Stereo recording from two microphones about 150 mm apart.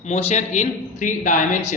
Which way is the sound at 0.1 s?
45° left (ahead or behind).